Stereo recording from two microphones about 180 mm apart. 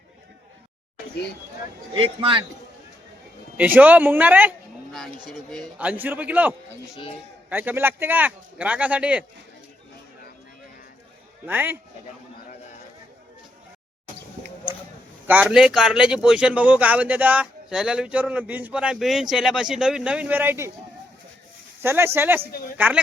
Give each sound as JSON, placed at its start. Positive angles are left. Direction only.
{"t": 1.9, "sound": "a man's voice", "side_deg": -30}
{"t": 3.6, "sound": "a man's voice", "side_deg": -10}
{"t": 7.5, "sound": "speech", "side_deg": -10}
{"t": 11.4, "sound": "speech", "side_deg": -10}
{"t": 15.3, "sound": "speech", "side_deg": -5}
{"t": 21.8, "sound": "speech", "side_deg": -15}